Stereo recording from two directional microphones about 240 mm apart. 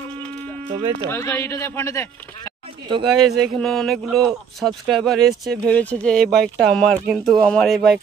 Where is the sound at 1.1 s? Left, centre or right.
Centre.